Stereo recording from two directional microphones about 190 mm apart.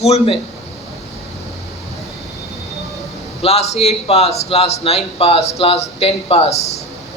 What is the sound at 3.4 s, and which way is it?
A man's voice, 35° left (ahead or behind).